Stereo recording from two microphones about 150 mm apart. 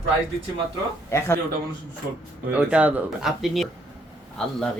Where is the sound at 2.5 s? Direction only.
10° right (ahead or behind).